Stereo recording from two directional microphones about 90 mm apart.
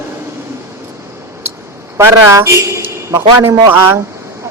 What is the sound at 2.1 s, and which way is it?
A man's voice, 35° right (ahead or behind).